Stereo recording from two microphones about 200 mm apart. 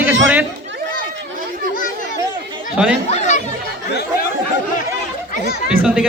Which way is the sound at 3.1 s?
35° left (ahead or behind).